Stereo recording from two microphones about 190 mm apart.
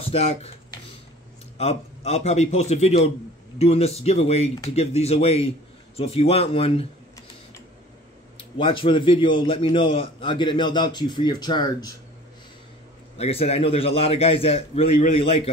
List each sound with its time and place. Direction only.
0.0 s speech: 30° left (ahead or behind)
1.6 s a man's voice: 35° left (ahead or behind)
8.4 s a man's voice: 25° left (ahead or behind)
13.2 s a man's voice: 30° left (ahead or behind)